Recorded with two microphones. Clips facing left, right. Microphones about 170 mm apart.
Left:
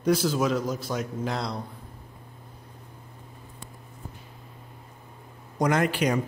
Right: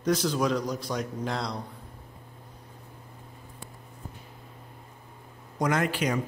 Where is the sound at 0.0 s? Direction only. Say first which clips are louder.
Left 2 dB; 10° left (ahead or behind).